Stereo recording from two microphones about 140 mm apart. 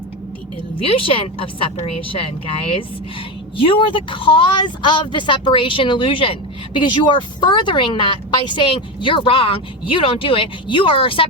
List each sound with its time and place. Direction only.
0.8 s speech: 40° left (ahead or behind)
3.6 s speech: 40° left (ahead or behind)